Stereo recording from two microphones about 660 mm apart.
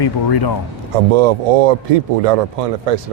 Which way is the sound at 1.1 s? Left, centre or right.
Right.